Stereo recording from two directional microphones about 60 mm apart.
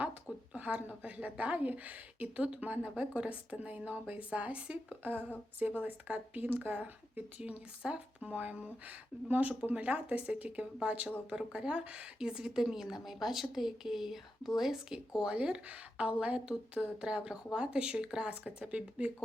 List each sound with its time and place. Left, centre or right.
0.5 s a woman's voice: right